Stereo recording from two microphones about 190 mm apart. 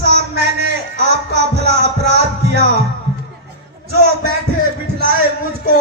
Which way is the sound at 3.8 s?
55° right (ahead or behind).